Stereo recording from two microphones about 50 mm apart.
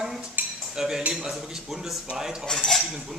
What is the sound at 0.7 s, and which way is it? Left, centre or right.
Cutlery, centre.